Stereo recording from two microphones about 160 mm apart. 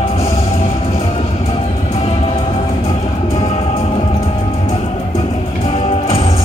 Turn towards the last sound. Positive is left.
turn(degrees=35)  # may be behind; listen again after turning